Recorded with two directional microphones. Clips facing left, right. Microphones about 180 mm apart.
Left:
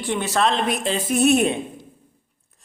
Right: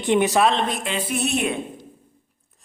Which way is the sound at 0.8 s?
40° left (ahead or behind).